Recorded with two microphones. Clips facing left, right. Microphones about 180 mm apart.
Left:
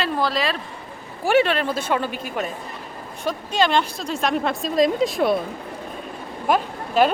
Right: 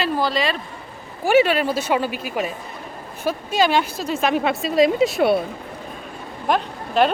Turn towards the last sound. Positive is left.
turn(degrees=5)  # may be behind; listen again after turning